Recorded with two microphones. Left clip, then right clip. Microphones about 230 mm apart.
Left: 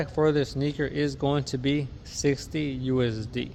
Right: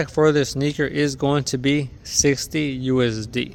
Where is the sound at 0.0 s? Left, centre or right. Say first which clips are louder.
Right 6 dB; right.